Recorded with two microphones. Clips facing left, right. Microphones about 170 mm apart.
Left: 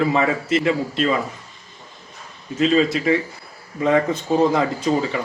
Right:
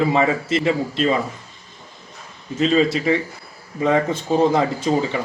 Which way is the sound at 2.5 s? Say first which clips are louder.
Even; 30° right (ahead or behind).